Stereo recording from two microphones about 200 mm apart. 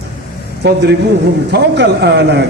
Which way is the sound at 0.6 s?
55° right (ahead or behind).